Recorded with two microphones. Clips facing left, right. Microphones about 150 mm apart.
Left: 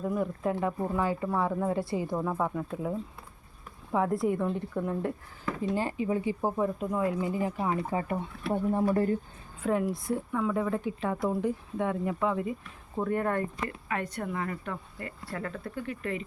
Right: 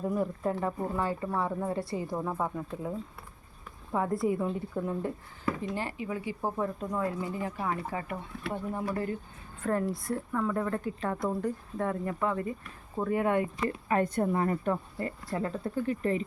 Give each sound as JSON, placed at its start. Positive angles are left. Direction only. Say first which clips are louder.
{"t": 0.0, "sound": "speech", "louder": "even", "side_deg": 0}
{"t": 5.7, "sound": "speech", "louder": "left 5 dB", "side_deg": 15}
{"t": 6.1, "sound": "speech", "louder": "left 6 dB", "side_deg": 30}
{"t": 6.4, "sound": "speech", "louder": "left 3 dB", "side_deg": 10}
{"t": 9.6, "sound": "speech", "louder": "left 2 dB", "side_deg": 10}
{"t": 13.7, "sound": "a woman's voice", "louder": "right 6 dB", "side_deg": -35}